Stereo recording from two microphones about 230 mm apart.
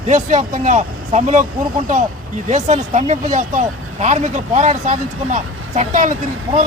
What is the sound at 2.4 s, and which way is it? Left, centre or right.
Speech, right.